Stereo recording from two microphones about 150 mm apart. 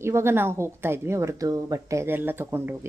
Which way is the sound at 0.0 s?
15° right (ahead or behind).